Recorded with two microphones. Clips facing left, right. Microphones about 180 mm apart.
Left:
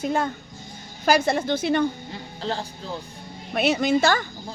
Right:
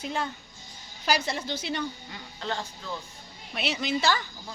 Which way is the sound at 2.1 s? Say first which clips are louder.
Left 4 dB; 35° left (ahead or behind).